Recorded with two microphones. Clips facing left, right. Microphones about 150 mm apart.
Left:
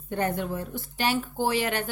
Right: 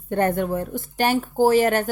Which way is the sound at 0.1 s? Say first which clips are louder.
Right 7 dB; 55° right (ahead or behind).